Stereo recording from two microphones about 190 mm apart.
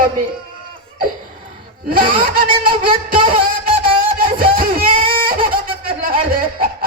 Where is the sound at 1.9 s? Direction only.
50° right (ahead or behind).